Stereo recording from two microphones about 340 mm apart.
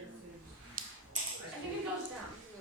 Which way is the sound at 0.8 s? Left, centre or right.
Right.